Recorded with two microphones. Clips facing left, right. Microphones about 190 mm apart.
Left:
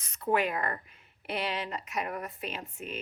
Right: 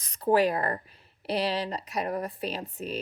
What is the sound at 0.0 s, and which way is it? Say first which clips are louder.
Speech: right 6 dB; 35° right (ahead or behind).